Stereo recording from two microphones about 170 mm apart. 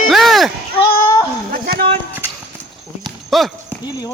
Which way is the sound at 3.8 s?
25° left (ahead or behind).